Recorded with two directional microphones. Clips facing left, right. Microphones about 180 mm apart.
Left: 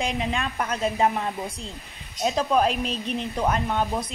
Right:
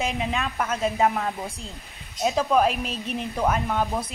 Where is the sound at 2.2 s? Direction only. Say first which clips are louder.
Right 1 dB; 5° right (ahead or behind).